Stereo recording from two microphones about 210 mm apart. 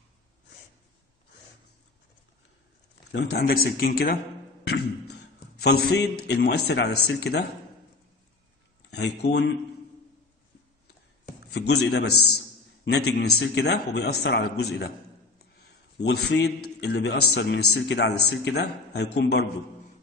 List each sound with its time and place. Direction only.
3.1 s a man's voice: 50° left (ahead or behind)
5.6 s a man's voice: 50° left (ahead or behind)
8.9 s speech: 55° left (ahead or behind)
11.2 s a man's voice: 50° left (ahead or behind)
15.6 s a sound: 50° left (ahead or behind)
16.7 s a man's voice: 55° left (ahead or behind)